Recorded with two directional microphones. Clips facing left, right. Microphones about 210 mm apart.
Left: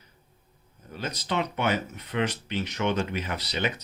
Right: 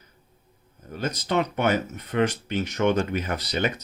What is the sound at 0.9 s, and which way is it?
Speech, 45° right (ahead or behind).